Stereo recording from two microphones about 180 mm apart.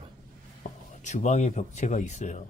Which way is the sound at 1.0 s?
40° left (ahead or behind).